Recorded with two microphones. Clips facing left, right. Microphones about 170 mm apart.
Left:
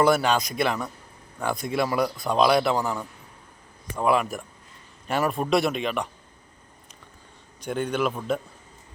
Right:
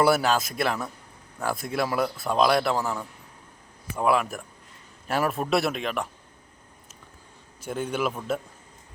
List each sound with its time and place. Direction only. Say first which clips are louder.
0.0 s speech: left 1 dB; 5° right (ahead or behind)
7.6 s speech: left 2 dB; 5° right (ahead or behind)